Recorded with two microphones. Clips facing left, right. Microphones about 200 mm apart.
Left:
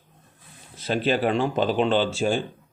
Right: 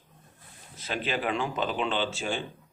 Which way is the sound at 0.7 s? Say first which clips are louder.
Left 8 dB; 35° left (ahead or behind).